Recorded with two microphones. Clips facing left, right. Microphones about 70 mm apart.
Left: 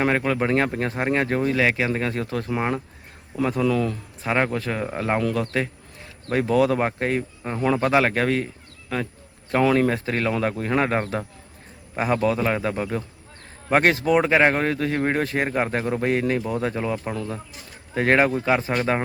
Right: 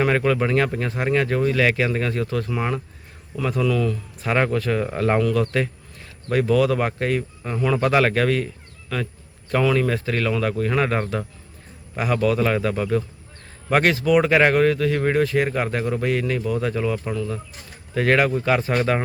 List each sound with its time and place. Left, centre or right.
0.0 s speech: centre
0.4 s speech: left
1.4 s speech: centre
4.3 s speech: centre
5.2 s speech: centre
7.8 s speech: centre
9.5 s speech: left